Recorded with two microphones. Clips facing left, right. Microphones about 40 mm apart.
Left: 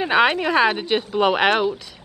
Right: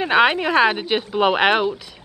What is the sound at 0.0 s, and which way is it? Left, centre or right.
A woman's voice, centre.